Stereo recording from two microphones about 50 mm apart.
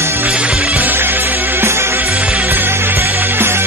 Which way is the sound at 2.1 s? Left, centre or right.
Right.